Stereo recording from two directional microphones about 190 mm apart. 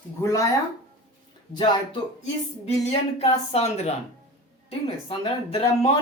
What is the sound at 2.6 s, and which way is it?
Speech, 35° left (ahead or behind).